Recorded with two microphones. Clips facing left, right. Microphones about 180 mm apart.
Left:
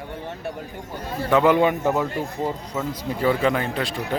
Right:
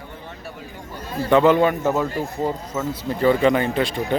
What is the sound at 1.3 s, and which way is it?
Speech, 5° left (ahead or behind).